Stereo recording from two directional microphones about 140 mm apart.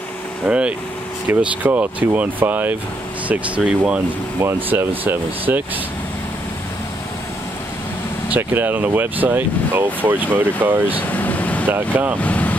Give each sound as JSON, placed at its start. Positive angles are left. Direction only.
{"t": 0.5, "sound": "speech", "side_deg": -10}
{"t": 8.3, "sound": "speech", "side_deg": -15}
{"t": 11.0, "sound": "vehicle", "side_deg": 10}
{"t": 11.7, "sound": "speech", "side_deg": -10}
{"t": 12.2, "sound": "vehicle", "side_deg": 10}